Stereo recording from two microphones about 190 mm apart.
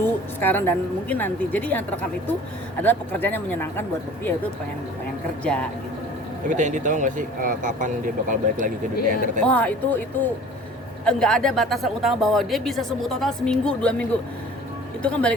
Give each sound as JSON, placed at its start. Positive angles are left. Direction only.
{"t": 0.0, "sound": "a woman's voice", "side_deg": 10}
{"t": 5.4, "sound": "a woman's voice", "side_deg": 5}
{"t": 6.5, "sound": "speech", "side_deg": -40}
{"t": 9.4, "sound": "a woman's voice", "side_deg": 5}
{"t": 11.0, "sound": "a woman's voice", "side_deg": 5}